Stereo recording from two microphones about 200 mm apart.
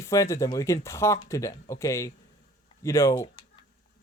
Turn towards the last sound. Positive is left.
turn(degrees=15)  # may be behind; listen again after turning